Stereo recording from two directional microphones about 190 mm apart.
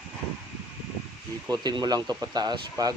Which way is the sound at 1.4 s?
20° right (ahead or behind).